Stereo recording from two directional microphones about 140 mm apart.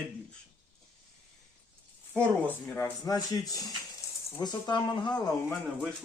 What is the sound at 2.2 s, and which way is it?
Speech, 10° left (ahead or behind).